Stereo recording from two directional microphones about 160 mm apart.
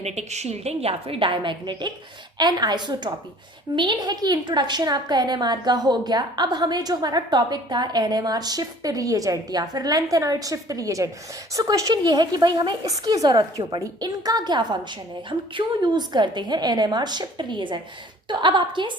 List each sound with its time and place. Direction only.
0.0 s a woman's voice: 45° right (ahead or behind)